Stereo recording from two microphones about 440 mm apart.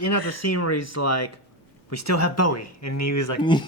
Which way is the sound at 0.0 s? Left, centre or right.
Left.